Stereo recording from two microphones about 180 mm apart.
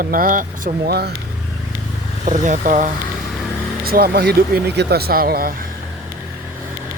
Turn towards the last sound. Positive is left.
turn(degrees=-55)  # may be behind; listen again after turning